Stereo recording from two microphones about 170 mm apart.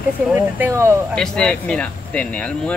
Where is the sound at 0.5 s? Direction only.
15° right (ahead or behind).